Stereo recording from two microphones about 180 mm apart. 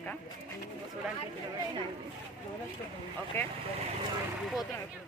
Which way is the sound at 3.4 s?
15° left (ahead or behind).